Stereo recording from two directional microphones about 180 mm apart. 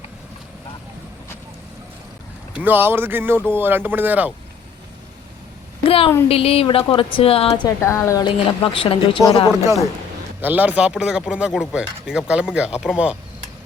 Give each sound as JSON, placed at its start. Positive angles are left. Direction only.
{"t": 2.5, "sound": "speech", "side_deg": -10}
{"t": 5.8, "sound": "a woman's voice", "side_deg": 30}
{"t": 8.4, "sound": "a woman's voice", "side_deg": 30}
{"t": 10.4, "sound": "speech", "side_deg": -10}